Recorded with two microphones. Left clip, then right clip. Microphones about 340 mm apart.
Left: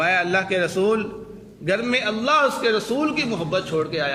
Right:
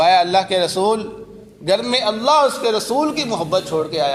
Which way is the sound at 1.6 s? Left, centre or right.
Centre.